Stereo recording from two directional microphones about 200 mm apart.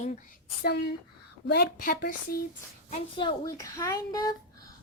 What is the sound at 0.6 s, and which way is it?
A woman's voice, 55° left (ahead or behind).